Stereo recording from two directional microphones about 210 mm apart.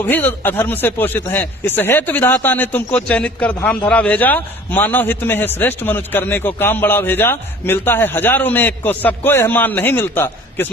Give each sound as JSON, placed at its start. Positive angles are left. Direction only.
{"t": 0.0, "sound": "a man's voice", "side_deg": 10}